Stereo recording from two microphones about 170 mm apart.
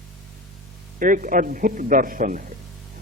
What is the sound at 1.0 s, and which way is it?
Speech, 50° right (ahead or behind).